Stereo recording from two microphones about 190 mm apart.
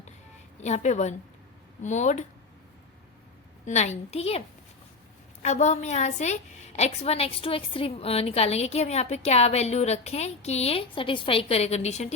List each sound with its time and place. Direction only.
0.6 s a woman's voice: 35° left (ahead or behind)
3.7 s a woman's voice: 35° left (ahead or behind)